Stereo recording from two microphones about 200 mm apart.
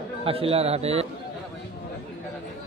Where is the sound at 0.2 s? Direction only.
30° right (ahead or behind).